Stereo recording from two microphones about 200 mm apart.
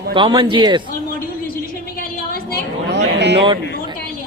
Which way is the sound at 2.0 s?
45° left (ahead or behind).